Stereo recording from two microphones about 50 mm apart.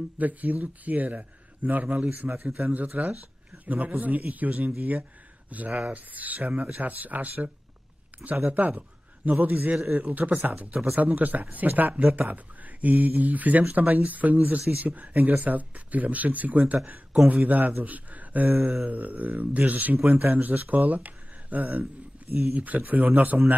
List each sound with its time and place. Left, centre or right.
0.2 s speech: right
8.5 s a man's voice: right